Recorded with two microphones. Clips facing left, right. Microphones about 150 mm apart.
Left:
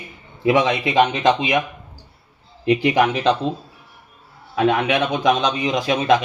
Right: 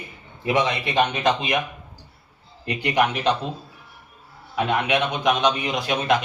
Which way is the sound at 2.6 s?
90° left.